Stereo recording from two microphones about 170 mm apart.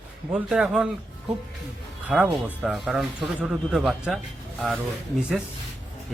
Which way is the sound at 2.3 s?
5° right (ahead or behind).